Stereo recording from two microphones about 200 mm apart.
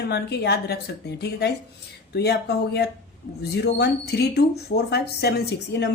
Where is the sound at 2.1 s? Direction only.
55° left (ahead or behind).